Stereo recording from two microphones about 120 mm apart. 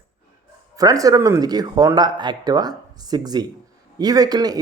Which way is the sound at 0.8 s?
30° right (ahead or behind).